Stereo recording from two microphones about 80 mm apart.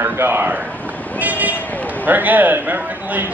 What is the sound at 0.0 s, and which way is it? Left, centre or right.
A man's voice, right.